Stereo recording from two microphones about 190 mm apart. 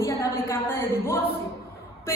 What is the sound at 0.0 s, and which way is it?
A woman's voice, 15° left (ahead or behind).